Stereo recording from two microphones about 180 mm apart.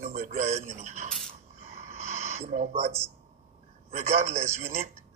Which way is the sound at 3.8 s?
40° right (ahead or behind).